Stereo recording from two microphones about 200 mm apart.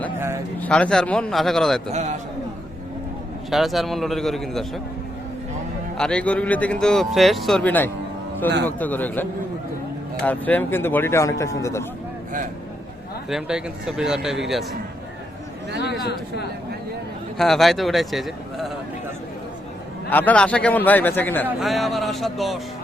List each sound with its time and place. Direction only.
0.2 s speech: 15° right (ahead or behind)
0.6 s a man's voice: 5° left (ahead or behind)
1.9 s a man's voice: 35° right (ahead or behind)
3.5 s a man's voice: centre (ahead or behind)
6.0 s a man's voice: 5° left (ahead or behind)
13.3 s a man's voice: 5° right (ahead or behind)
15.8 s speech: 55° left (ahead or behind)
17.3 s a man's voice: centre (ahead or behind)
20.1 s speech: 10° left (ahead or behind)
21.4 s a man's voice: centre (ahead or behind)